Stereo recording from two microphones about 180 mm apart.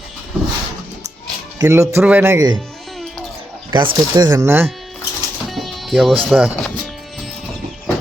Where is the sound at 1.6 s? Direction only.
15° right (ahead or behind).